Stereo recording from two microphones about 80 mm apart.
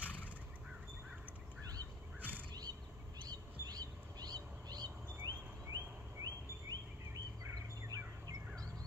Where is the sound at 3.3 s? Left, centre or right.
Right.